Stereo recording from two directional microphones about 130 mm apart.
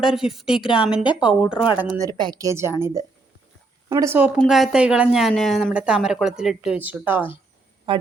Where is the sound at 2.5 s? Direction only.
20° right (ahead or behind).